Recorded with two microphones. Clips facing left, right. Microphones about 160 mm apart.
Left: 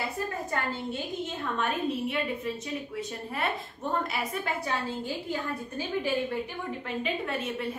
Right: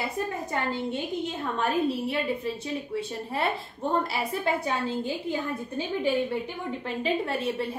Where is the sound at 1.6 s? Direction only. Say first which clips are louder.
Right 4 dB; 35° right (ahead or behind).